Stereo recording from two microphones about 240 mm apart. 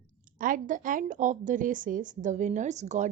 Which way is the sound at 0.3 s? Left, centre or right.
Right.